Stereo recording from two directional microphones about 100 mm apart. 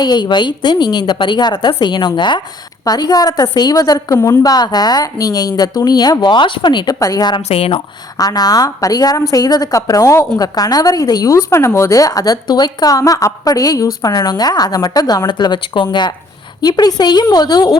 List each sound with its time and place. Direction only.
0.0 s a woman's voice: 45° left (ahead or behind)
7.4 s speech: 75° left (ahead or behind)
8.2 s a woman's voice: 40° left (ahead or behind)